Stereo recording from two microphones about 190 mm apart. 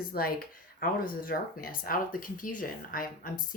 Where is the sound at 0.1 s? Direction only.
50° left (ahead or behind).